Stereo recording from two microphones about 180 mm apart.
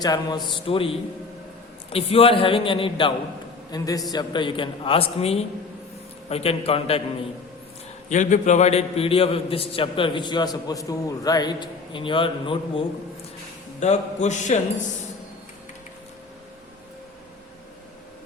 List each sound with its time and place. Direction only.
0.0 s a man's voice: 20° left (ahead or behind)
8.1 s a man's voice: 45° left (ahead or behind)
13.7 s speech: 40° left (ahead or behind)